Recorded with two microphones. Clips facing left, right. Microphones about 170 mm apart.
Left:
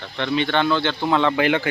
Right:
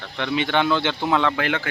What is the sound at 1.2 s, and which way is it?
Speech, 5° left (ahead or behind).